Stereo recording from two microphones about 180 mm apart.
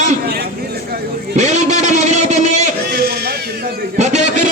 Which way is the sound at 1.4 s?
40° right (ahead or behind).